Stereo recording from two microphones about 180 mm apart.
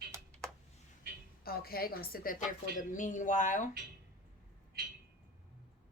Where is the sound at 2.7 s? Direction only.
45° left (ahead or behind).